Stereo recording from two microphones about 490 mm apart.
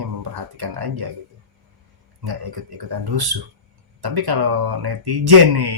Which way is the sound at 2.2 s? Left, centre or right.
Right.